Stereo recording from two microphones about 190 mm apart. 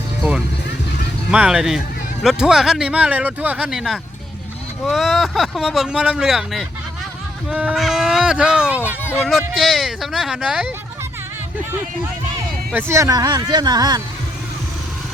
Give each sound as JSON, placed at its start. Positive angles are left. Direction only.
{"t": 0.2, "sound": "music", "side_deg": 0}
{"t": 1.3, "sound": "speech", "side_deg": -5}
{"t": 12.7, "sound": "speech", "side_deg": -15}